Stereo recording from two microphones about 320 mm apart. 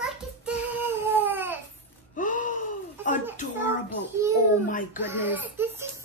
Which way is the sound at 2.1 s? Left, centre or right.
Left.